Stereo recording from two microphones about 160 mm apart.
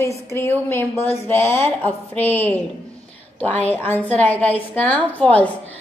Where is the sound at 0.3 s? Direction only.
15° left (ahead or behind).